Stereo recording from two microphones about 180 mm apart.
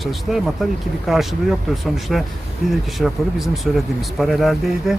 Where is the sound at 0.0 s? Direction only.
Centre (ahead or behind).